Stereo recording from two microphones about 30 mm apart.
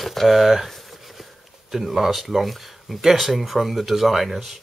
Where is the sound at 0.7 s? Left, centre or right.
Centre.